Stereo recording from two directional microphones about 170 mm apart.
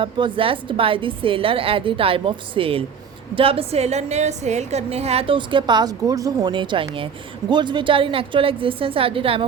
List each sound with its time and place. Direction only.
0.0 s a woman's voice: 30° right (ahead or behind)